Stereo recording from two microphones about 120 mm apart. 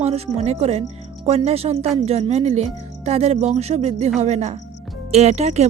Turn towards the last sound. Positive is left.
turn(degrees=-70)  # may be behind; listen again after turning